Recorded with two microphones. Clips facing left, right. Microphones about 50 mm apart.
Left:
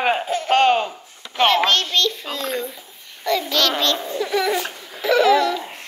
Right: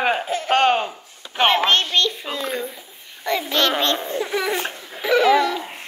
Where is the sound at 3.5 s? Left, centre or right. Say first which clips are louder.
Right 3 dB; right.